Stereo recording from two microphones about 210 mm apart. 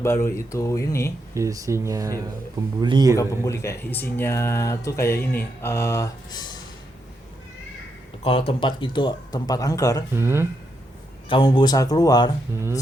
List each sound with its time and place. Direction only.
0.0 s speech: 10° left (ahead or behind)
1.3 s a man's voice: 15° right (ahead or behind)
3.2 s speech: 15° left (ahead or behind)
8.2 s speech: 25° left (ahead or behind)
10.2 s speech: 10° right (ahead or behind)
11.3 s speech: 25° left (ahead or behind)